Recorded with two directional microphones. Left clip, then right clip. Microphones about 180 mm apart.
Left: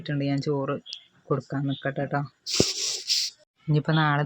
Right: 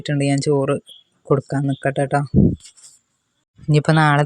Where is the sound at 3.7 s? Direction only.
50° right (ahead or behind).